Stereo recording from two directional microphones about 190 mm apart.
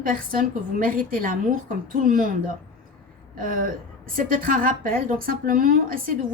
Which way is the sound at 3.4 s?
50° right (ahead or behind).